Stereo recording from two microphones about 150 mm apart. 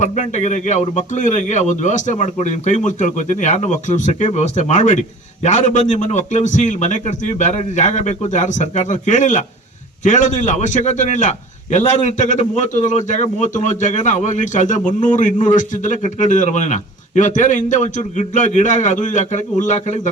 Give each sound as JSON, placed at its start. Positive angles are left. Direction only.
{"t": 0.0, "sound": "a man's voice", "side_deg": 55}